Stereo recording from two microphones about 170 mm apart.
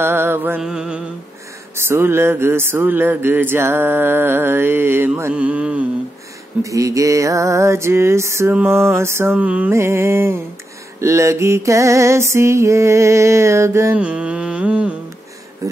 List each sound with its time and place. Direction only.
0.0 s music: 15° right (ahead or behind)
6.6 s music: 20° right (ahead or behind)
15.6 s a sound: 20° right (ahead or behind)